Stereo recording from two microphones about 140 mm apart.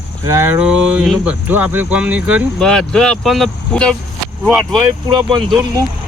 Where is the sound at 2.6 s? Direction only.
5° left (ahead or behind).